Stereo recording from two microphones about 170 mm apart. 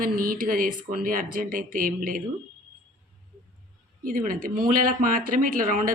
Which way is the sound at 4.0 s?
55° right (ahead or behind).